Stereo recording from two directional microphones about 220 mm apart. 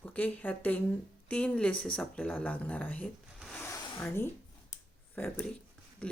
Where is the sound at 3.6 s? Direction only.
10° left (ahead or behind).